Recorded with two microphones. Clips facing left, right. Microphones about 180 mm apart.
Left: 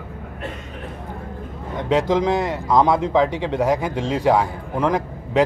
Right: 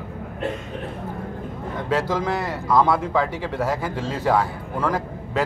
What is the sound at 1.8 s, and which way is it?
A man's voice, 20° left (ahead or behind).